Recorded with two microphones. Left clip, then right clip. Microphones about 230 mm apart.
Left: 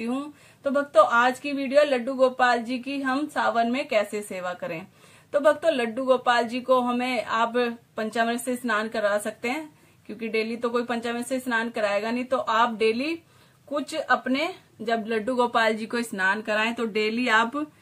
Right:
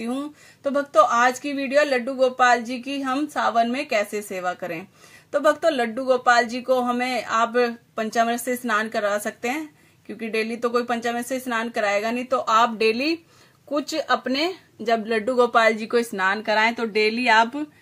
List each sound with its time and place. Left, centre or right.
0.7 s speech: right